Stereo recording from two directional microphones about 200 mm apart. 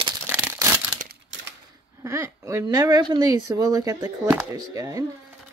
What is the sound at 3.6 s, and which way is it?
Speech, 15° right (ahead or behind).